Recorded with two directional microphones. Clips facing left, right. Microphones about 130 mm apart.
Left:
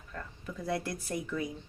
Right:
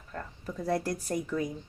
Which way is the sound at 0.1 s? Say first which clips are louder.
Right 3 dB; 40° right (ahead or behind).